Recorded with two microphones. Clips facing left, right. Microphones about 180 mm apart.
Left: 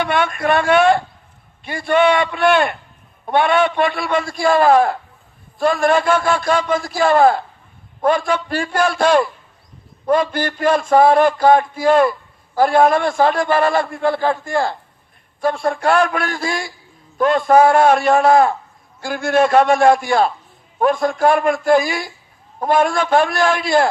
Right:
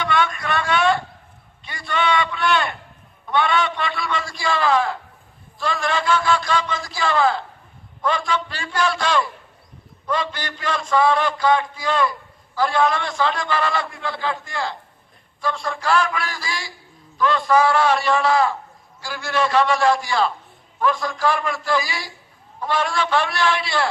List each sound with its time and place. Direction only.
0.0 s a man's voice: 55° left (ahead or behind)